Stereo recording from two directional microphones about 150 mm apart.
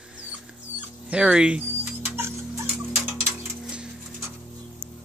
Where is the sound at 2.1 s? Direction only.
20° right (ahead or behind).